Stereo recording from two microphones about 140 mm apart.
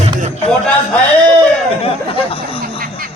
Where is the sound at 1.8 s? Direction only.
40° left (ahead or behind).